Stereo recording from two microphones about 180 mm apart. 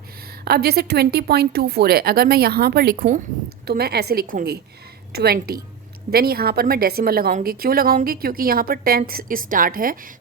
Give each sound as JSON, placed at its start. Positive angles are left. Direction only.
{"t": 0.4, "sound": "a woman's voice", "side_deg": -60}